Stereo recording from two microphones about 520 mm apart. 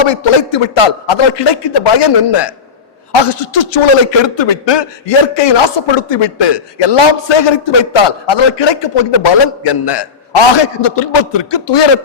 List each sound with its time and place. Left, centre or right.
0.0 s a man's voice: left